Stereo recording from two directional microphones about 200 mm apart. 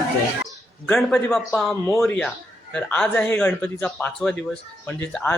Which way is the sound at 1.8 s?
15° left (ahead or behind).